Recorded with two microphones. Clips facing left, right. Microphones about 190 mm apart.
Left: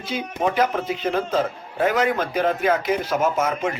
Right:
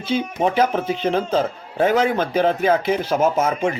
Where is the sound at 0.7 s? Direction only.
30° right (ahead or behind).